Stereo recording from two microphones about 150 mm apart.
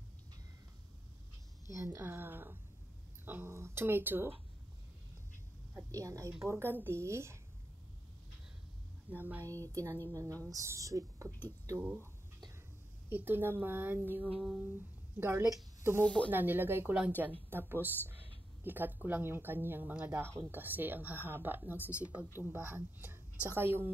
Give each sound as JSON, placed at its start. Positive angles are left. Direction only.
{"t": 1.7, "sound": "speech", "side_deg": -15}
{"t": 5.9, "sound": "a woman's voice", "side_deg": -20}
{"t": 9.1, "sound": "speech", "side_deg": -10}
{"t": 9.5, "sound": "a woman's voice", "side_deg": -20}
{"t": 13.1, "sound": "speech", "side_deg": -15}
{"t": 16.0, "sound": "speech", "side_deg": 10}
{"t": 16.3, "sound": "speech", "side_deg": -15}